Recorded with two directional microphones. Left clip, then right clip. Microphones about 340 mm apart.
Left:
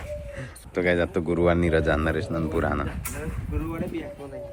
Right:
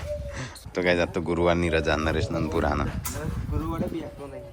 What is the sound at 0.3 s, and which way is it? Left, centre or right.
Speech, centre.